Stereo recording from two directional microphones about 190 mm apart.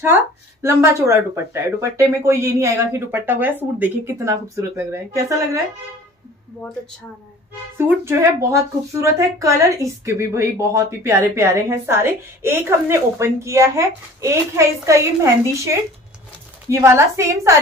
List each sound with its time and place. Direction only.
0.0 s speech: 15° right (ahead or behind)
7.7 s speech: 10° right (ahead or behind)